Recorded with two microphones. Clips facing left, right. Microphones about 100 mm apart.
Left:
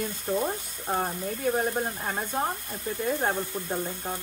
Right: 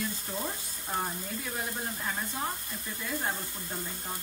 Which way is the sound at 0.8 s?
50° left (ahead or behind).